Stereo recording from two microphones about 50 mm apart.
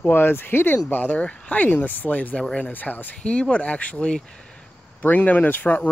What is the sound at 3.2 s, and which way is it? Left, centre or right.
Speech, left.